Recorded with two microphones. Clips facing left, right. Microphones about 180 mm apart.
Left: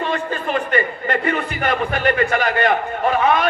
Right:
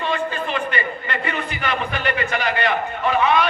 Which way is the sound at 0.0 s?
45° left (ahead or behind).